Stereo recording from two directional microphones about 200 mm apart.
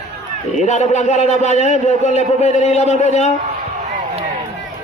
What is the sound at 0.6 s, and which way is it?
A man's voice, 35° left (ahead or behind).